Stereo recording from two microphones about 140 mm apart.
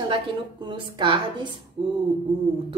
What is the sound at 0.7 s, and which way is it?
Speech, 35° right (ahead or behind).